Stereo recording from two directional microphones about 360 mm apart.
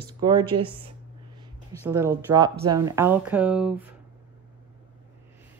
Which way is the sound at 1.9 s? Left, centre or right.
Centre.